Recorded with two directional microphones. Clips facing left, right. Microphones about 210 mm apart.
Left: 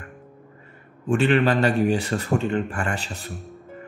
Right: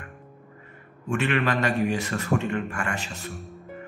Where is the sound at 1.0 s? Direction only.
30° left (ahead or behind).